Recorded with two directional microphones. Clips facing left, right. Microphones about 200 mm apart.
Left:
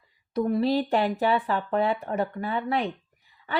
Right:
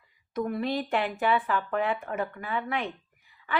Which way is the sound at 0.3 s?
35° left (ahead or behind).